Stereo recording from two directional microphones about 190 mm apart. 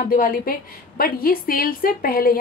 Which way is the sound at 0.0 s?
45° left (ahead or behind).